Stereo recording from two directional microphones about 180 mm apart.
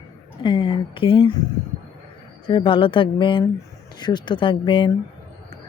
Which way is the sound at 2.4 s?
30° left (ahead or behind).